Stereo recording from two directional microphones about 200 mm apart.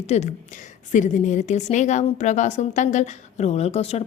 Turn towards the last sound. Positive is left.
turn(degrees=30)  # may be behind; listen again after turning